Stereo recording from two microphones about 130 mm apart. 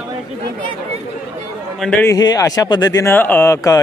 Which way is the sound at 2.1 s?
30° left (ahead or behind).